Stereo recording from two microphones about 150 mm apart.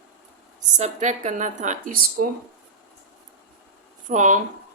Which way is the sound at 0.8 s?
50° right (ahead or behind).